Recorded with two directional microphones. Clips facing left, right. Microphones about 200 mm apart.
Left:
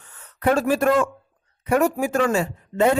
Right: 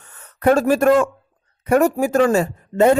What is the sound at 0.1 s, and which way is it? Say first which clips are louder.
A man's voice: right 5 dB; 45° right (ahead or behind).